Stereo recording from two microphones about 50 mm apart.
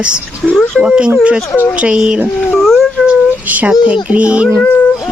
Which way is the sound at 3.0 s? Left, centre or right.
Right.